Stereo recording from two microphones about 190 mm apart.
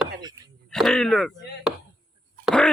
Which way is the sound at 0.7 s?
Centre (ahead or behind).